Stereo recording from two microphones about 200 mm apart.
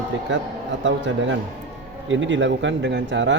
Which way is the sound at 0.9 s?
65° right (ahead or behind).